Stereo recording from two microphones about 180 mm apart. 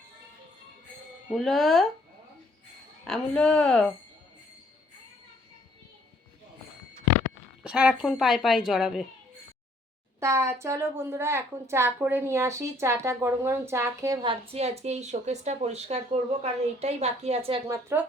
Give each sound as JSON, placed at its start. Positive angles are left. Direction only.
{"t": 1.3, "sound": "a woman's voice", "side_deg": 0}
{"t": 3.0, "sound": "a woman's voice", "side_deg": 5}
{"t": 7.6, "sound": "a woman's voice", "side_deg": -5}
{"t": 10.2, "sound": "a woman's voice", "side_deg": -15}
{"t": 17.7, "sound": "a woman's voice", "side_deg": -15}